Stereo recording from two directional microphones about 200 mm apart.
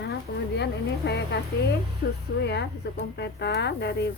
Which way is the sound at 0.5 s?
60° left (ahead or behind).